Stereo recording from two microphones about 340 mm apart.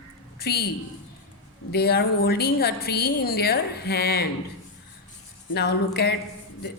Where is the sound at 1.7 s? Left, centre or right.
Left.